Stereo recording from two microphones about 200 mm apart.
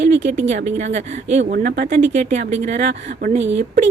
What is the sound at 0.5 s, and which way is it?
Speech, 35° right (ahead or behind).